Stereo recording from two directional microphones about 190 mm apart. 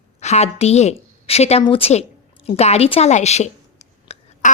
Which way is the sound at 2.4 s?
35° left (ahead or behind).